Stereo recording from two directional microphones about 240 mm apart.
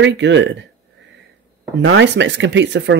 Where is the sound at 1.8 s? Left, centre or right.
Right.